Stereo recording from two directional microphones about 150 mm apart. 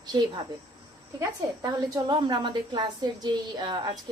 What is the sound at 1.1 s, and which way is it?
A woman's voice, 25° right (ahead or behind).